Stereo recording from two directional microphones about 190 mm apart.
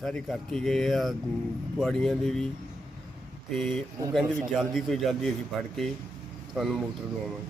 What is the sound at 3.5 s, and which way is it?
Speech, centre (ahead or behind).